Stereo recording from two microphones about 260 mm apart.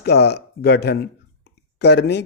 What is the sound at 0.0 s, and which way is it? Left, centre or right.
Speech, left.